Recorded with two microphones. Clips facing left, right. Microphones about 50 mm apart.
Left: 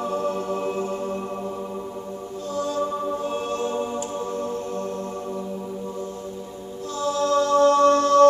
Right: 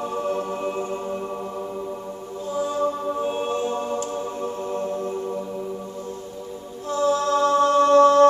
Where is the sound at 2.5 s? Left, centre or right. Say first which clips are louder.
Right 2 dB; centre.